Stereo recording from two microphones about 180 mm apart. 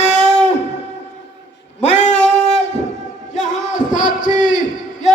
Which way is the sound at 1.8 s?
40° left (ahead or behind).